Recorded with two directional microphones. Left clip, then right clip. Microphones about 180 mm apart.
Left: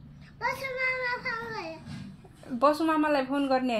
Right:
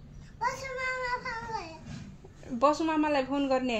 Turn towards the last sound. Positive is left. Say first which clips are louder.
# left 2 dB
turn(degrees=-30)  # may be behind; listen again after turning